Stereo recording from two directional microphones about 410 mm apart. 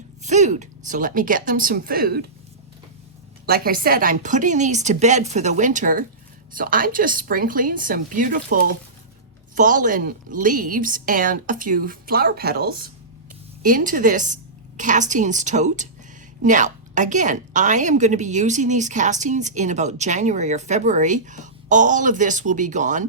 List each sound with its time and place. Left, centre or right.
0.3 s a woman's voice: centre
3.4 s a woman's voice: right